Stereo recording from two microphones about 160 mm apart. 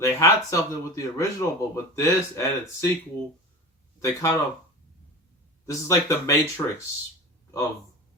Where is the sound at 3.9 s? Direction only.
20° left (ahead or behind).